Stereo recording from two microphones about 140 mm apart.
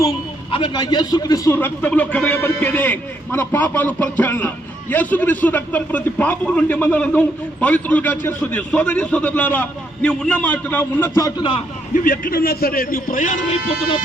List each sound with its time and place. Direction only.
0.5 s a man's voice: 35° left (ahead or behind)
1.5 s a man's voice: 10° left (ahead or behind)
11.3 s a man's voice: 40° left (ahead or behind)
12.0 s a man's voice: 80° left